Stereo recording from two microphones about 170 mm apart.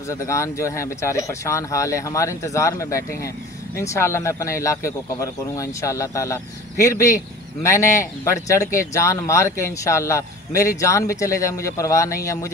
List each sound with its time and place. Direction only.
0.1 s speech: 15° left (ahead or behind)